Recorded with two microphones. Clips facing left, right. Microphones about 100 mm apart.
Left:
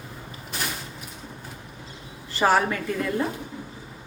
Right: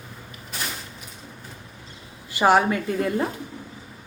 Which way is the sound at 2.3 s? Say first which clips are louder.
Right 3 dB; 20° right (ahead or behind).